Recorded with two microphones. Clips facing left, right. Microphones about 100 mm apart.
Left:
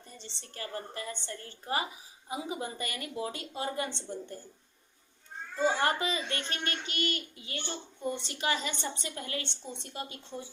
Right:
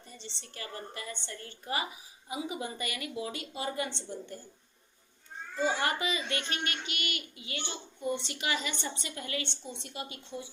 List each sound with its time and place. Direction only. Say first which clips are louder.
0.2 s a child's voice: left 2 dB; 40° left (ahead or behind)
5.6 s a child's voice: left 2 dB; 35° left (ahead or behind)